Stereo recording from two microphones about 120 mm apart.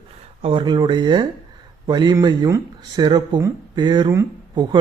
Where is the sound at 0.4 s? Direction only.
40° right (ahead or behind).